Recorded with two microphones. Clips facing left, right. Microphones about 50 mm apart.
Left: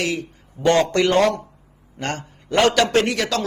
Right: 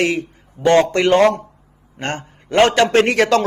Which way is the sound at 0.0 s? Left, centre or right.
Right.